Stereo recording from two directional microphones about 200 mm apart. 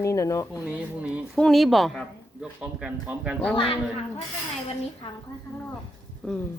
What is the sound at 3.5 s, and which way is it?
Speech, 25° left (ahead or behind).